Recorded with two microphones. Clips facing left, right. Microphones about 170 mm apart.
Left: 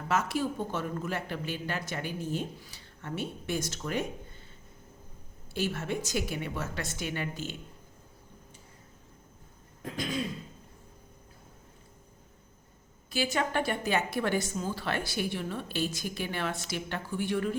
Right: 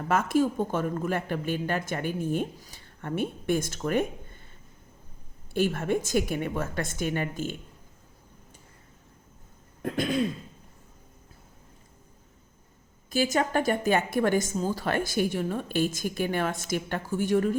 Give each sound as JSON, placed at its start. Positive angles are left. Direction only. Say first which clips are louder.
{"t": 0.1, "sound": "a woman's voice", "louder": "right 5 dB", "side_deg": -50}
{"t": 5.5, "sound": "a woman's voice", "louder": "right 6 dB", "side_deg": -55}
{"t": 9.8, "sound": "throat clearing", "louder": "right 7 dB", "side_deg": -55}
{"t": 13.1, "sound": "a woman's voice", "louder": "right 5 dB", "side_deg": -45}